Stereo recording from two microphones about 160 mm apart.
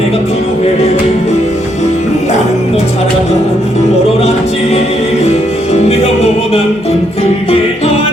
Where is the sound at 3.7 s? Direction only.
40° left (ahead or behind).